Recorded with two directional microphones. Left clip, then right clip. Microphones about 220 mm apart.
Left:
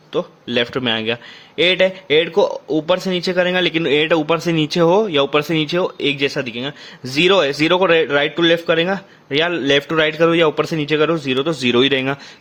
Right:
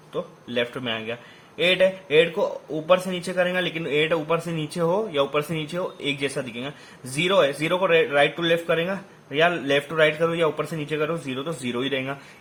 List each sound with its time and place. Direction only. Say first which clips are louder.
0.1 s a man's voice: left 9 dB; 45° left (ahead or behind)